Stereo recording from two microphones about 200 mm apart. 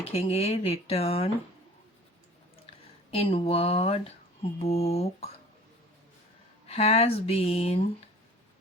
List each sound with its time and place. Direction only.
0.1 s speech: 30° left (ahead or behind)
3.1 s speech: 30° left (ahead or behind)
6.7 s speech: 30° left (ahead or behind)